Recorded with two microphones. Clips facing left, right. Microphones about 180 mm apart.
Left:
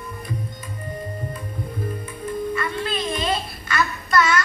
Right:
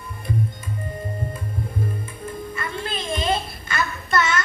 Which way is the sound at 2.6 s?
25° right (ahead or behind).